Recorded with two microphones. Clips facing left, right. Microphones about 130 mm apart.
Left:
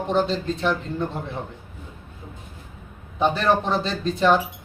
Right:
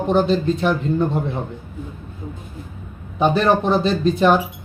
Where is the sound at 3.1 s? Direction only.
15° right (ahead or behind).